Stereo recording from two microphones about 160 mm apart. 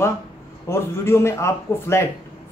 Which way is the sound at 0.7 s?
15° left (ahead or behind).